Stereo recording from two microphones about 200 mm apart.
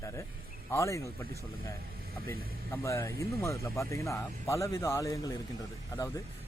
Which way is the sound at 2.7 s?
15° left (ahead or behind).